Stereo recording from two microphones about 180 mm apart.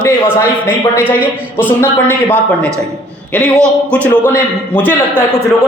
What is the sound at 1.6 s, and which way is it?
A man's voice, 10° left (ahead or behind).